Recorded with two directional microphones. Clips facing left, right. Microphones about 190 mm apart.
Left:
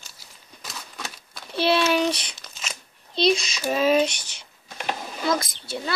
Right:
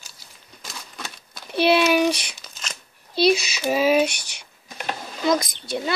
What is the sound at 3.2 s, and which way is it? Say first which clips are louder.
A child's voice: right 3 dB; 5° right (ahead or behind).